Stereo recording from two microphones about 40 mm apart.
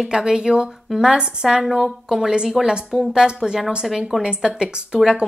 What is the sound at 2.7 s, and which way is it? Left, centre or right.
Speech, centre.